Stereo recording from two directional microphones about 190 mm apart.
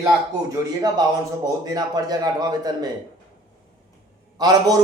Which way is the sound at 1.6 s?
20° right (ahead or behind).